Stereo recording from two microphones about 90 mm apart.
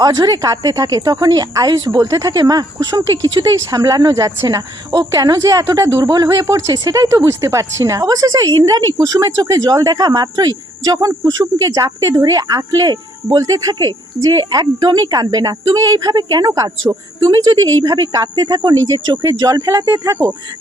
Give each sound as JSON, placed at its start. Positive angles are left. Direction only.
{"t": 0.0, "sound": "a woman's voice", "side_deg": -45}
{"t": 16.9, "sound": "a woman's voice", "side_deg": -40}
{"t": 19.2, "sound": "a woman's voice", "side_deg": -40}